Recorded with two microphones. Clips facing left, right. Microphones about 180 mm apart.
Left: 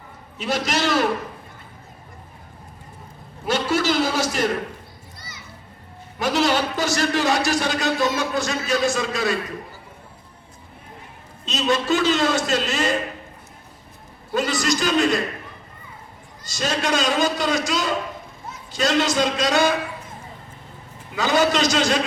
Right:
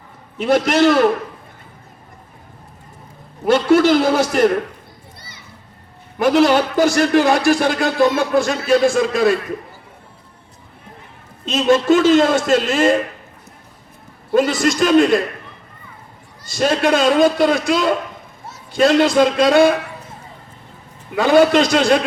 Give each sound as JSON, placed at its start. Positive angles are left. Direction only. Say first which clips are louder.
{"t": 0.3, "sound": "speech", "louder": "right 9 dB", "side_deg": -55}
{"t": 3.4, "sound": "a man's voice", "louder": "right 9 dB", "side_deg": -55}
{"t": 6.1, "sound": "speech", "louder": "right 7 dB", "side_deg": -55}
{"t": 11.4, "sound": "a man's voice", "louder": "right 8 dB", "side_deg": -50}
{"t": 14.3, "sound": "a man's voice", "louder": "right 7 dB", "side_deg": -50}
{"t": 16.6, "sound": "speech", "louder": "right 7 dB", "side_deg": -55}
{"t": 21.2, "sound": "speech", "louder": "right 7 dB", "side_deg": -55}